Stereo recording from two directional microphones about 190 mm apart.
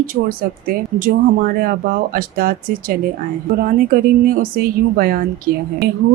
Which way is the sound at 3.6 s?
50° right (ahead or behind).